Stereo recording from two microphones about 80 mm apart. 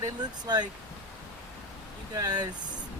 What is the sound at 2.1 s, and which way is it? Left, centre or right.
Speech, right.